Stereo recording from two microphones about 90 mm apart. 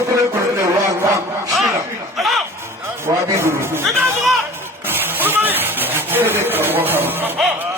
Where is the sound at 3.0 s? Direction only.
25° right (ahead or behind).